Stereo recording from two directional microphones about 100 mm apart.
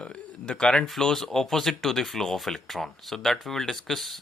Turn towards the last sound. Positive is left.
turn(degrees=0)  # may be behind; listen again after turning